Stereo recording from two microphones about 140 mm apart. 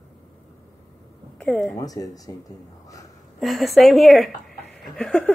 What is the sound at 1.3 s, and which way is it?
Speech, 10° left (ahead or behind).